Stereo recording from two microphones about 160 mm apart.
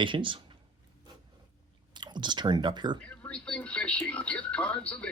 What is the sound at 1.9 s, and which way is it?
Speech, 30° right (ahead or behind).